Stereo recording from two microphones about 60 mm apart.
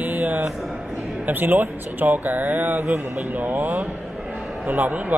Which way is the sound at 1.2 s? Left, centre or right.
Right.